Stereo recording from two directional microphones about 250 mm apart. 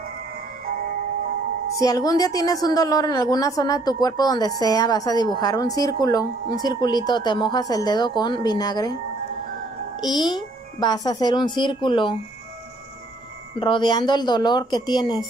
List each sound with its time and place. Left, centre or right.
1.8 s a woman's voice: centre
10.0 s a woman's voice: centre
13.6 s a woman's voice: centre